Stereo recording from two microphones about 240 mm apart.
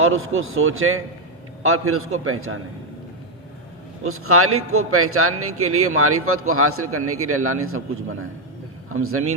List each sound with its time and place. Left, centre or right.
0.0 s a man's voice: right
4.0 s a man's voice: right
8.9 s a man's voice: right